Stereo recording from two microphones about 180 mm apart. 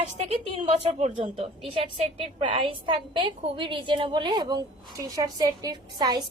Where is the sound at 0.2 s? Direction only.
30° right (ahead or behind).